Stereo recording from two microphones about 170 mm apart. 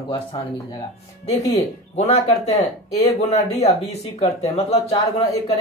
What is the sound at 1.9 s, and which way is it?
Speech, 40° left (ahead or behind).